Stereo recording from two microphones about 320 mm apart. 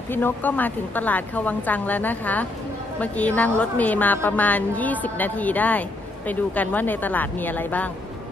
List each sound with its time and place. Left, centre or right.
0.1 s a woman's voice: centre